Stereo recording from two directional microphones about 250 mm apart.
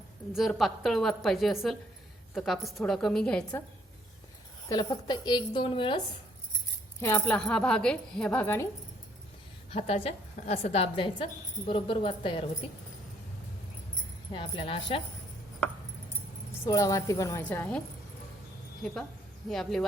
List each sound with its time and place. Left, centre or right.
0.3 s a woman's voice: centre
4.7 s a woman's voice: centre
7.0 s a woman's voice: centre
9.7 s a woman's voice: left
14.3 s a woman's voice: left
16.6 s a woman's voice: centre
19.5 s a woman's voice: centre